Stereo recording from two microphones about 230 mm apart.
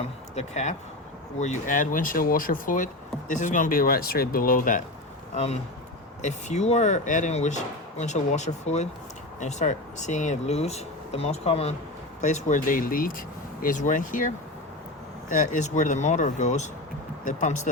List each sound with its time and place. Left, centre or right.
0.3 s a man's voice: left